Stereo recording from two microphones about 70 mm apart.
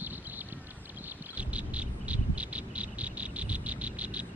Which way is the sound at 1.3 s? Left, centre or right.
Centre.